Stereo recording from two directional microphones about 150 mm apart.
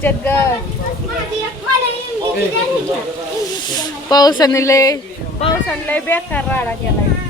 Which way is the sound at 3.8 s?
25° left (ahead or behind).